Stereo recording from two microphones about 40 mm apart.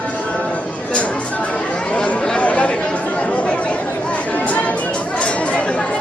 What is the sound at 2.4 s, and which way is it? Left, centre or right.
Chatter, left.